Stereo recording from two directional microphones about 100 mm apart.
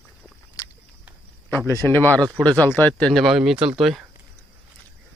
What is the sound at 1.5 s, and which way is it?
Speech, 25° left (ahead or behind).